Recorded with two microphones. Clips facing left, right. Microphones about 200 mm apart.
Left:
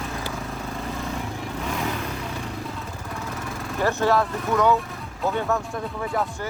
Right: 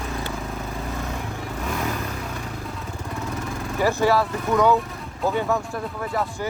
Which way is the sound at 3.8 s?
10° right (ahead or behind).